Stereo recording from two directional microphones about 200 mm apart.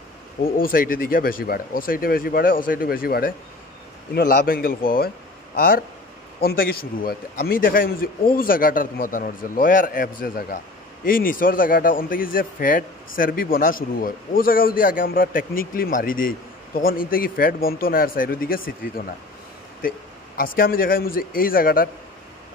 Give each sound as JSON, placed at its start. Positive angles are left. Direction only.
{"t": 0.4, "sound": "a man's voice", "side_deg": 45}
{"t": 6.4, "sound": "a man's voice", "side_deg": 45}
{"t": 20.3, "sound": "a man's voice", "side_deg": 45}